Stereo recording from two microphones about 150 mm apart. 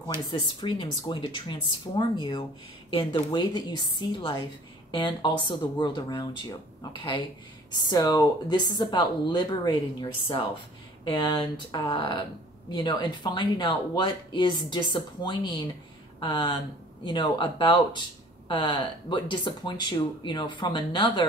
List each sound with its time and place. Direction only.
0.3 s speech: 35° left (ahead or behind)